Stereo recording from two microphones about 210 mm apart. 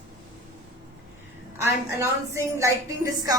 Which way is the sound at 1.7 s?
15° right (ahead or behind).